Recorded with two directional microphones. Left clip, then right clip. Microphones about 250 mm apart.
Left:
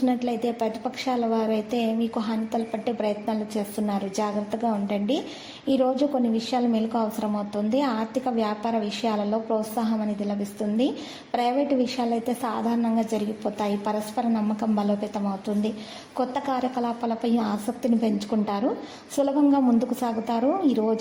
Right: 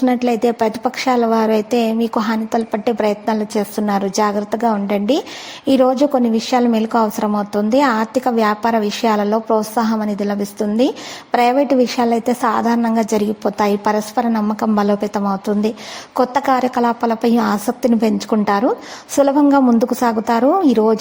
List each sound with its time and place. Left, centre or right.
0.0 s a woman's voice: right